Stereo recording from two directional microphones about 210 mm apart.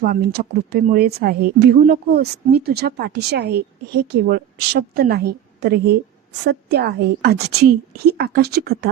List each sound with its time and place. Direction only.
0.0 s speech: 45° right (ahead or behind)